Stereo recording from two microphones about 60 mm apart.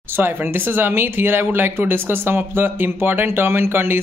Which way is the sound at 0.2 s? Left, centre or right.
Right.